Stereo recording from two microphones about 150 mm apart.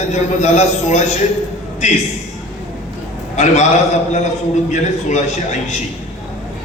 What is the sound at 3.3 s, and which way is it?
Speech, 50° left (ahead or behind).